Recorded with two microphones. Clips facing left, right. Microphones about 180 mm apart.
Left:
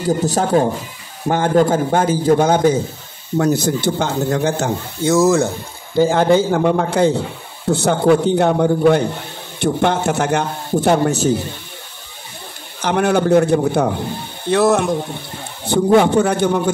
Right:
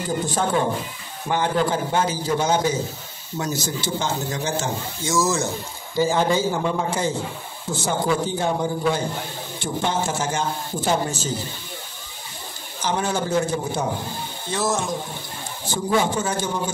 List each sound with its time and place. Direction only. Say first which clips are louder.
0.2 s a man's voice: left 4 dB; 40° left (ahead or behind); by 11.4 s 60° left (ahead or behind)
12.8 s speech: left 8 dB; 65° left (ahead or behind)